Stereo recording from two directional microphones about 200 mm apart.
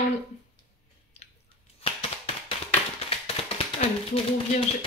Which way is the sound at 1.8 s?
25° left (ahead or behind).